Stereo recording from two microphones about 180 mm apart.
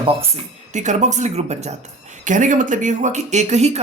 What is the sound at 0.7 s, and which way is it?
Speech, 40° right (ahead or behind).